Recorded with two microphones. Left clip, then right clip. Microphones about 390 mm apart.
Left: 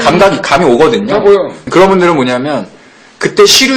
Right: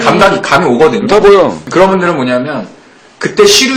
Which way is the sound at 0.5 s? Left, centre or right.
Left.